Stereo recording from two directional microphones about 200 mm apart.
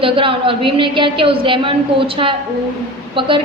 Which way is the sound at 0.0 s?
25° right (ahead or behind).